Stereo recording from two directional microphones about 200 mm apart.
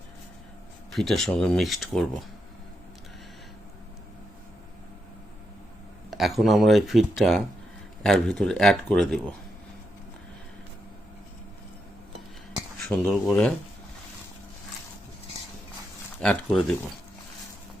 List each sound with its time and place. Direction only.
0.9 s speech: centre (ahead or behind)
6.1 s speech: centre (ahead or behind)
12.9 s speech: 5° left (ahead or behind)
16.2 s speech: centre (ahead or behind)